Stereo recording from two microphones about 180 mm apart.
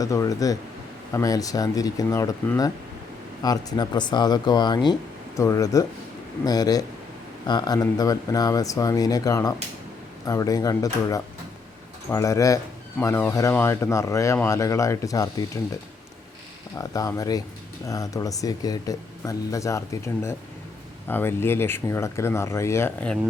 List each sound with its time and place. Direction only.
0.0 s speech: 20° left (ahead or behind)
16.7 s speech: 20° left (ahead or behind)